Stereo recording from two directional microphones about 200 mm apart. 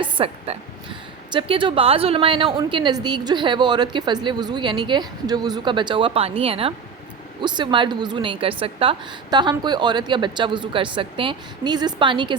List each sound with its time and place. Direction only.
0.0 s a woman's voice: 30° right (ahead or behind)